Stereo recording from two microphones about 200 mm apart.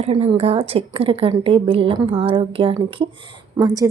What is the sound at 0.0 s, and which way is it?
A woman's voice, 30° right (ahead or behind).